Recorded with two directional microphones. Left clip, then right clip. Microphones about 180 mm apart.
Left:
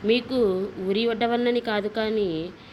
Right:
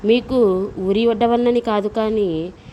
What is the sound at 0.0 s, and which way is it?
A woman's voice, 55° right (ahead or behind).